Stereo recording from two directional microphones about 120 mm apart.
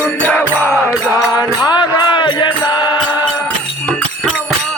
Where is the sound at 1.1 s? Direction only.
35° left (ahead or behind).